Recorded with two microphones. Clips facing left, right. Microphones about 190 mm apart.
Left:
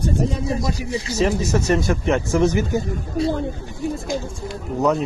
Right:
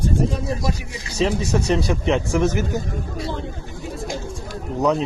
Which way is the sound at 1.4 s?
15° right (ahead or behind).